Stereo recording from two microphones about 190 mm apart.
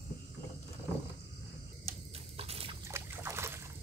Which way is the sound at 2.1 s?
30° right (ahead or behind).